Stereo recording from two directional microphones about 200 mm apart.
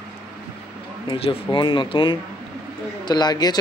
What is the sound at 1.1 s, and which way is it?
Speech, 25° left (ahead or behind).